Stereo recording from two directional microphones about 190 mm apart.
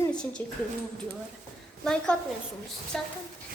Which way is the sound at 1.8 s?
5° left (ahead or behind).